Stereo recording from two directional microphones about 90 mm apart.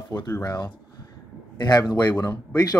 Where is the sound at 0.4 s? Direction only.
45° left (ahead or behind).